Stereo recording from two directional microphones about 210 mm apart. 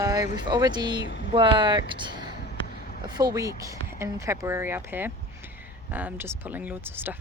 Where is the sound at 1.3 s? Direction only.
25° right (ahead or behind).